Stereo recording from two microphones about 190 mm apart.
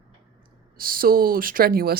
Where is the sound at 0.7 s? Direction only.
50° right (ahead or behind).